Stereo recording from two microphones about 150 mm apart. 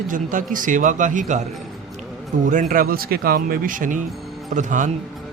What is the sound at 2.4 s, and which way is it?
Speech, 60° right (ahead or behind).